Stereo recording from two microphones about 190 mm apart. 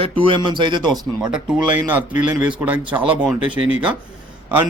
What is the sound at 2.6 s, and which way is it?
A man's voice, 10° right (ahead or behind).